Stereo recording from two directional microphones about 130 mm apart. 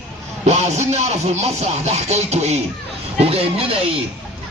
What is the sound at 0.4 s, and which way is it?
Speech, 60° right (ahead or behind).